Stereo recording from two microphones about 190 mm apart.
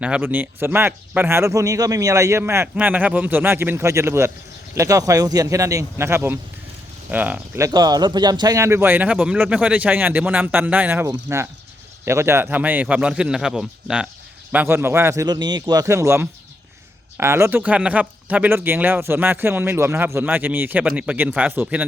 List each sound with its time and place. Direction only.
0.0 s speech: 5° right (ahead or behind)